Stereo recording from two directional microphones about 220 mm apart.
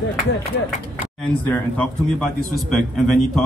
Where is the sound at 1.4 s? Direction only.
5° left (ahead or behind).